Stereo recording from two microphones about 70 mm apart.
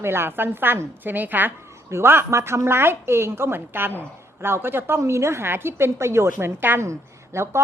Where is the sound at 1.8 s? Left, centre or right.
Right.